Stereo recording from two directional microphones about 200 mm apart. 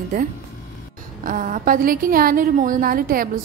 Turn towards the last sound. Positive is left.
turn(degrees=-45)  # may be behind; listen again after turning